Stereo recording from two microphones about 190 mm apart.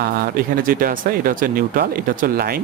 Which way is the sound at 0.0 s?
50° right (ahead or behind).